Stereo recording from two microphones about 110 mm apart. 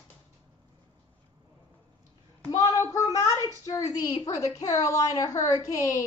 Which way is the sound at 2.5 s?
30° left (ahead or behind).